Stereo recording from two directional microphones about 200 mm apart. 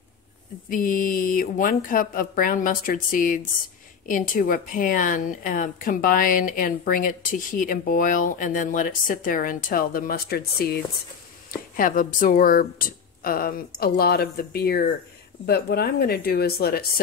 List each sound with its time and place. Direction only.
0.7 s speech: 45° left (ahead or behind)